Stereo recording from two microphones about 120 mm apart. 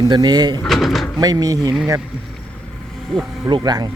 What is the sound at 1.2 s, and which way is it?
Speech, 30° right (ahead or behind).